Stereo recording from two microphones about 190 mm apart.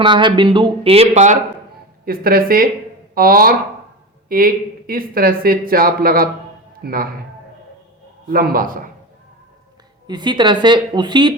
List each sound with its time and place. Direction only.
0.0 s speech: 25° right (ahead or behind)
2.0 s speech: 50° right (ahead or behind)
8.3 s speech: 50° right (ahead or behind)
10.1 s speech: 25° right (ahead or behind)